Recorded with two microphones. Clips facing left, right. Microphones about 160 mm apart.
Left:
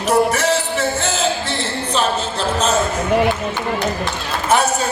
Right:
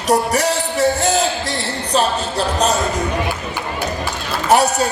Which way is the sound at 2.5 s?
35° right (ahead or behind).